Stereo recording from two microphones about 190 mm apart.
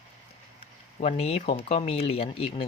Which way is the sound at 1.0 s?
35° left (ahead or behind).